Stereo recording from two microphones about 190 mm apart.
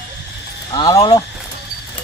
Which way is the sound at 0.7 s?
25° left (ahead or behind).